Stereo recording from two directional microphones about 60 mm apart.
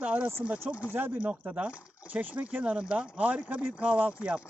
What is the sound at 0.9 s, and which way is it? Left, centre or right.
Speech, right.